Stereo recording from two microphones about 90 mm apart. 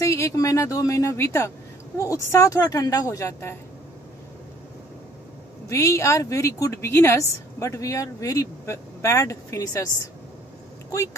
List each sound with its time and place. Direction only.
0.0 s speech: 35° left (ahead or behind)
5.7 s speech: 35° left (ahead or behind)